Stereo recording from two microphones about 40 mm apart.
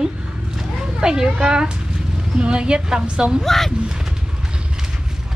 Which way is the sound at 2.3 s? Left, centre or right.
Right.